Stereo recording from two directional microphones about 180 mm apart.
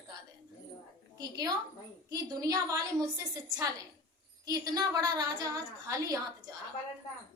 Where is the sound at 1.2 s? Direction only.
20° right (ahead or behind).